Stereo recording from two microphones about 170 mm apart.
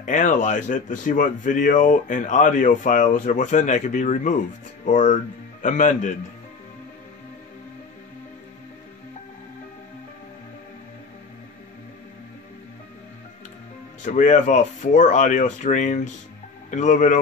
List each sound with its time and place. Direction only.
0.0 s speech: 50° left (ahead or behind)
14.0 s speech: 45° left (ahead or behind)